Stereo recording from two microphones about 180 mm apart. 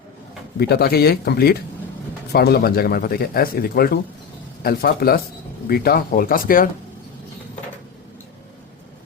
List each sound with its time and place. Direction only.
0.7 s speech: 60° left (ahead or behind)